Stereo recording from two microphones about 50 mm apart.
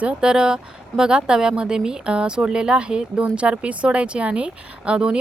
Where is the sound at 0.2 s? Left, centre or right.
Centre.